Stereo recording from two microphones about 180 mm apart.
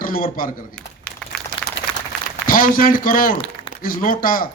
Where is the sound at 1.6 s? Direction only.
5° left (ahead or behind).